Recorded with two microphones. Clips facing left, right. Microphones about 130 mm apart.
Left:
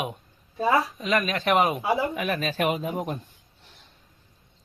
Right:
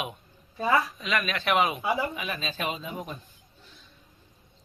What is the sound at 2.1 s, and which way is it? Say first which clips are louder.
Speech: left 7 dB; 65° left (ahead or behind).